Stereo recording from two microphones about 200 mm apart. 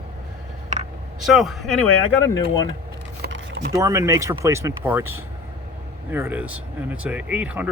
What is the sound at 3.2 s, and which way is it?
Typing, 60° right (ahead or behind).